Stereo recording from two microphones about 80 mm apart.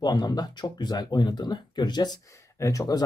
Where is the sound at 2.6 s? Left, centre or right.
Left.